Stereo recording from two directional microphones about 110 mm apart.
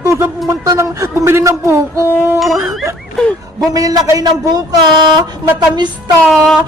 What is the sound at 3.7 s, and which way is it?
Speech, 35° right (ahead or behind).